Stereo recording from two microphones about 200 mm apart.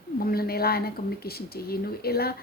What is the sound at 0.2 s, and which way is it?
A woman's voice, 50° left (ahead or behind).